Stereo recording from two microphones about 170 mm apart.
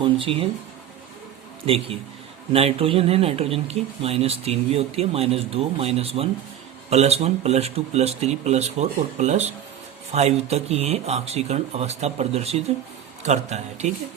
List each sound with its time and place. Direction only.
0.0 s speech: 30° right (ahead or behind)
1.6 s a man's voice: 35° right (ahead or behind)